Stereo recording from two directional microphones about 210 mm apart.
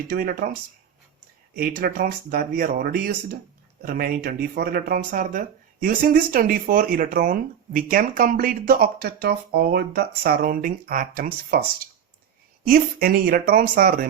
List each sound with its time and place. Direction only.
0.1 s speech: 45° right (ahead or behind)
1.5 s speech: 45° right (ahead or behind)
12.6 s speech: 45° right (ahead or behind)